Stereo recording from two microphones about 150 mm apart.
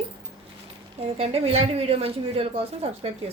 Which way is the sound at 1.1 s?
40° right (ahead or behind).